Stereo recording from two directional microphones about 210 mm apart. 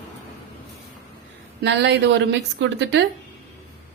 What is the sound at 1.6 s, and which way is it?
A woman's voice, 55° right (ahead or behind).